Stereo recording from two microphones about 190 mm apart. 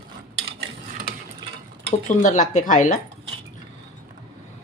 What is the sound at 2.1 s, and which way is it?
Cutlery, 40° left (ahead or behind).